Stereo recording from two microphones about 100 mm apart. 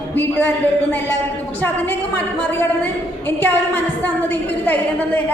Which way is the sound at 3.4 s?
20° left (ahead or behind).